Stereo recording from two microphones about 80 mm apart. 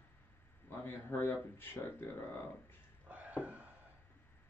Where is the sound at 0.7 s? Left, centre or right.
Left.